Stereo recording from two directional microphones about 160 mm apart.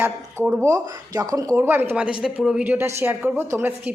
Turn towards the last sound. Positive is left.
turn(degrees=-15)  # may be behind; listen again after turning